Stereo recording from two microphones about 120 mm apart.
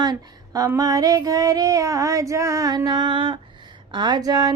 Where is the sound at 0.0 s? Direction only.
35° right (ahead or behind).